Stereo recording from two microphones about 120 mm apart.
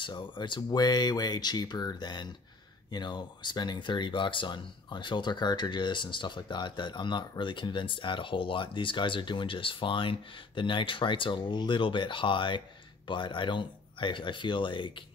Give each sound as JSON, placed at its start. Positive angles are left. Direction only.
{"t": 0.0, "sound": "speech", "side_deg": 40}